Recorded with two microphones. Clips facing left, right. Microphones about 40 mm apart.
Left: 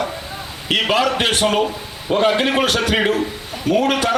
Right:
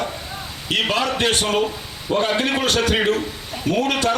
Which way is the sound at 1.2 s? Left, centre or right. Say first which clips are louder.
Left 2 dB; left.